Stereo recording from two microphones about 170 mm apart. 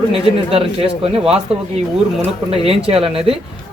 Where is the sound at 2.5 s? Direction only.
35° right (ahead or behind).